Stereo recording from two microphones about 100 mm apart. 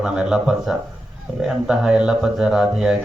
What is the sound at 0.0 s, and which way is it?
Speech, 5° right (ahead or behind).